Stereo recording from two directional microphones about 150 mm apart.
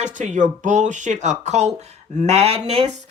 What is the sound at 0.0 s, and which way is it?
Speech, 55° right (ahead or behind).